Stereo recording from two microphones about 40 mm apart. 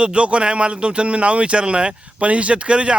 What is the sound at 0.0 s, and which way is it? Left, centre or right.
Speech, right.